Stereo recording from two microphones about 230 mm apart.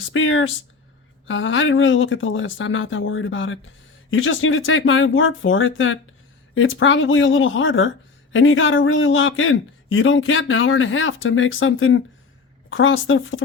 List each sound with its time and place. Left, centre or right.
0.0 s speech: left